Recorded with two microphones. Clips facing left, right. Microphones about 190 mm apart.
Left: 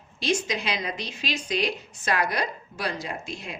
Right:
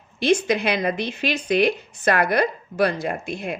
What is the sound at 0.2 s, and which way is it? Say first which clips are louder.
Speech: right 8 dB; 60° right (ahead or behind).